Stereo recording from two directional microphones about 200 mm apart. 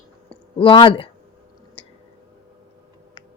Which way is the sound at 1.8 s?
25° left (ahead or behind).